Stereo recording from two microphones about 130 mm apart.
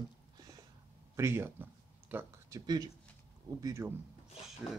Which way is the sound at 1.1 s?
20° right (ahead or behind).